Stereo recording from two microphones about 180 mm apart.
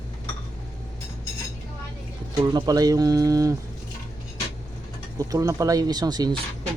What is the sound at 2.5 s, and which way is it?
Speech, 20° right (ahead or behind).